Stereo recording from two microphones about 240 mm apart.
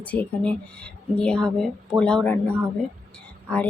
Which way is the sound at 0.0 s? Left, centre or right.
Centre.